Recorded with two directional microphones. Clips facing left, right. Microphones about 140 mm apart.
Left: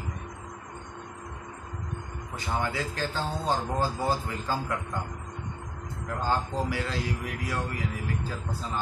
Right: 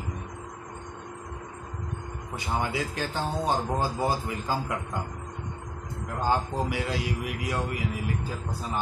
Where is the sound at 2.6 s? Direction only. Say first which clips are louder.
Right 1 dB; 15° right (ahead or behind).